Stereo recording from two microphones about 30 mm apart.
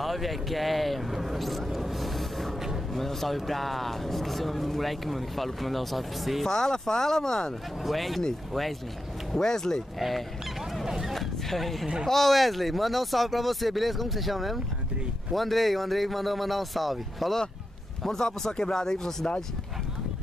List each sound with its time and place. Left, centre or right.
0.0 s a sound: centre
2.9 s speech: centre
6.4 s speech: centre
7.8 s speech: centre
9.4 s speech: centre
9.9 s speech: centre
10.9 s a sound: centre
11.1 s a sound: centre
12.1 s speech: centre
18.0 s speech: centre